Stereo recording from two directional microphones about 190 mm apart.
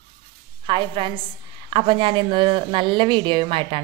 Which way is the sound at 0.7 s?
25° right (ahead or behind).